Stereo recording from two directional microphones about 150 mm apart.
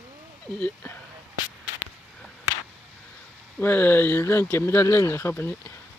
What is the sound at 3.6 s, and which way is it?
Speech, 15° left (ahead or behind).